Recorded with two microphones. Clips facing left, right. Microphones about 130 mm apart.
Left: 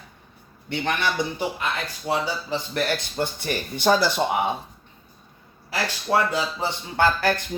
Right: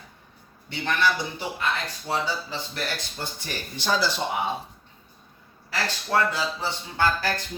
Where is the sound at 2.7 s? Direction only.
55° left (ahead or behind).